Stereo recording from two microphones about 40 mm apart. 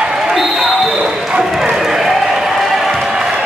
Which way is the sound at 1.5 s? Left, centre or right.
Centre.